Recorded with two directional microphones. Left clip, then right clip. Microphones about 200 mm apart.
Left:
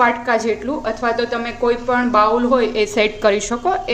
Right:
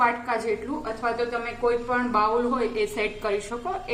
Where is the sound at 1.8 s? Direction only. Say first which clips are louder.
Left 8 dB; 50° left (ahead or behind).